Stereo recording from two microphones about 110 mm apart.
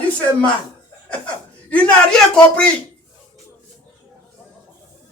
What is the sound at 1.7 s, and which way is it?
Speech, 10° left (ahead or behind).